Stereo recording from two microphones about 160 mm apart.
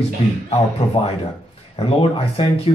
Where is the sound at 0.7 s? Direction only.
35° left (ahead or behind).